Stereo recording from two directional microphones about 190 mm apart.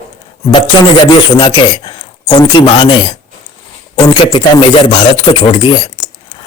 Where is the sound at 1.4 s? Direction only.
25° left (ahead or behind).